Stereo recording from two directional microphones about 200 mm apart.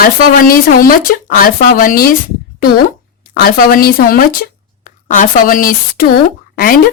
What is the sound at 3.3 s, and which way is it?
A woman's voice, 45° left (ahead or behind).